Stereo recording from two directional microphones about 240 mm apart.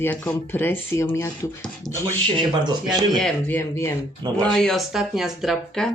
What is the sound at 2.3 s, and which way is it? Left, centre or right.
Speech, centre.